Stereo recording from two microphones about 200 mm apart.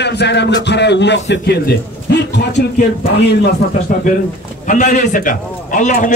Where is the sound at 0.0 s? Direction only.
55° left (ahead or behind).